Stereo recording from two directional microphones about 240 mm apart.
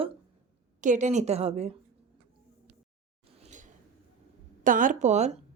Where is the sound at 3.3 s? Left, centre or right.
Right.